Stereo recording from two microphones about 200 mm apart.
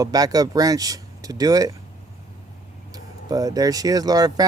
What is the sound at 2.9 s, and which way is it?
Speech, 20° right (ahead or behind).